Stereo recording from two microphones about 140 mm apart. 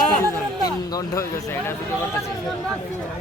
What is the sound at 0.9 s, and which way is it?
Speech, 20° left (ahead or behind).